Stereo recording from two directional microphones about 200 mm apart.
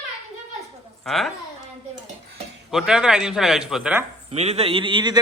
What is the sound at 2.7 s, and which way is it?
Speech, 5° right (ahead or behind).